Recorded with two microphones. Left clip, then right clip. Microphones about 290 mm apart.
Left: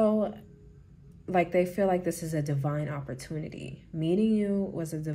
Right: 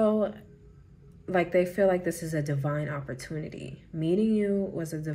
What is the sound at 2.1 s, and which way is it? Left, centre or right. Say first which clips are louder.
Speech: right 1 dB; centre.